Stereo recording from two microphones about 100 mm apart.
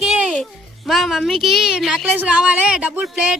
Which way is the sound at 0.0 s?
10° right (ahead or behind).